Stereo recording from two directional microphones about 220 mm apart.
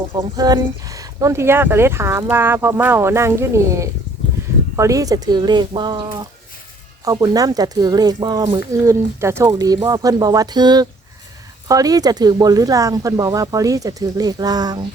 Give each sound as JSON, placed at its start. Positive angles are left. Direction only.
{"t": 0.1, "sound": "speech", "side_deg": -15}